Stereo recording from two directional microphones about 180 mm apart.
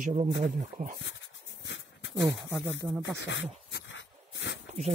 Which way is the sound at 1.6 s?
90° left.